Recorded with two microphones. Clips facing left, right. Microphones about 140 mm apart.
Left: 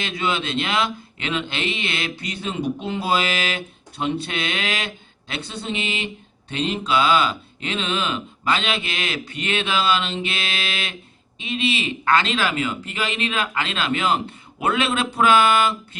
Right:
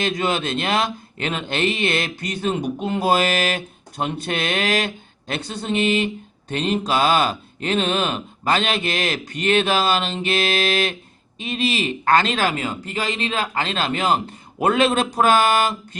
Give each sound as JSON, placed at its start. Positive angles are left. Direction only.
{"t": 0.0, "sound": "speech", "side_deg": -45}